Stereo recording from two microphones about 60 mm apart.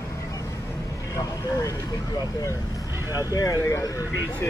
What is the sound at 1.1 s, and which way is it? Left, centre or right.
Vehicle, left.